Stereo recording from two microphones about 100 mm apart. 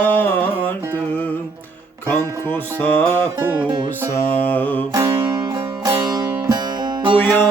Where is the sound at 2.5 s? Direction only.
20° left (ahead or behind).